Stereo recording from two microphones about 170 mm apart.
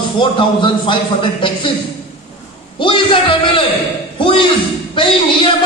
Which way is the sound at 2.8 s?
30° left (ahead or behind).